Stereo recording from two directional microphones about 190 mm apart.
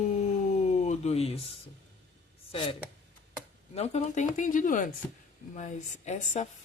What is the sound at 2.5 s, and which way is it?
Speech, 25° left (ahead or behind).